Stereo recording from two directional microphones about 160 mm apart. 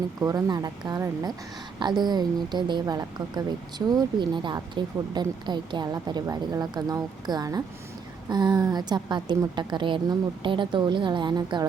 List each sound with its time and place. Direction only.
0.2 s a woman's voice: 20° right (ahead or behind)